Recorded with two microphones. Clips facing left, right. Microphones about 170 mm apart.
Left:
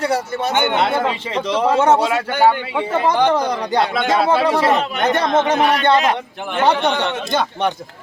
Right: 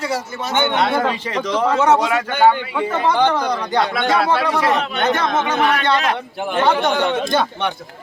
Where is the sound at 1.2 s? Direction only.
30° left (ahead or behind).